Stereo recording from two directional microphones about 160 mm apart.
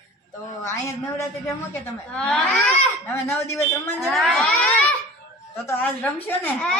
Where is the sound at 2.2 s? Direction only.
5° left (ahead or behind).